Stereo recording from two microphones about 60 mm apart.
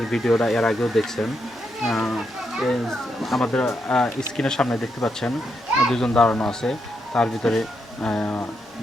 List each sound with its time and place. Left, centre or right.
0.1 s speech: centre
3.4 s speech: centre
4.4 s speech: centre
5.9 s speech: centre
8.0 s speech: centre